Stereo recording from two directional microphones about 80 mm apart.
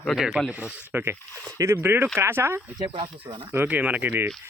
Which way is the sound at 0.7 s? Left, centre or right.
Right.